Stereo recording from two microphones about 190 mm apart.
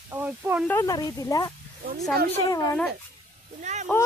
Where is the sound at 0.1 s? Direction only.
10° right (ahead or behind).